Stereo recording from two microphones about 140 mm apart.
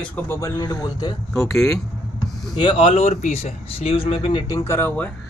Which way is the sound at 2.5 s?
35° left (ahead or behind).